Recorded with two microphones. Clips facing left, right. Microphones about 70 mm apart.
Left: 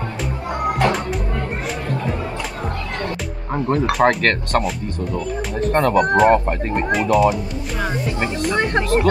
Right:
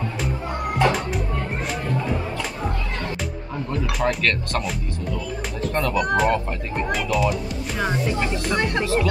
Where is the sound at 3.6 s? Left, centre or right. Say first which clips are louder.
Left 8 dB; left.